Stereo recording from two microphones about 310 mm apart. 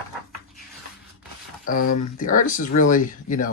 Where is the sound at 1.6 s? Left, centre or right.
Left.